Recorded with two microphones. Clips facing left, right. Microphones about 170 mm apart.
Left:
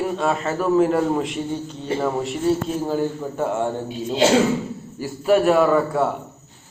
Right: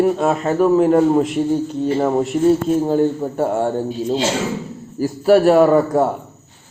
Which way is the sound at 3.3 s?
35° right (ahead or behind).